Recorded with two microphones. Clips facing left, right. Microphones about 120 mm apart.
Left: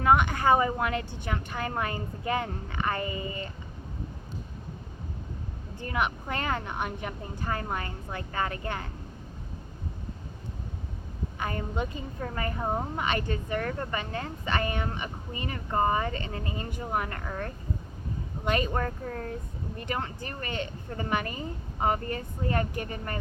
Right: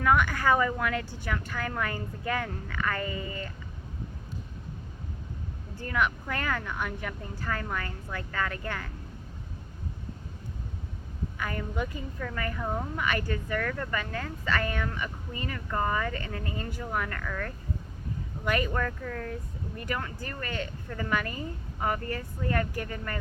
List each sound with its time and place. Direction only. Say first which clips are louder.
0.0 s a woman's voice: left 2 dB; 25° left (ahead or behind)
5.7 s a woman's voice: right 1 dB; 20° left (ahead or behind)
11.3 s a woman's voice: left 1 dB; 25° left (ahead or behind)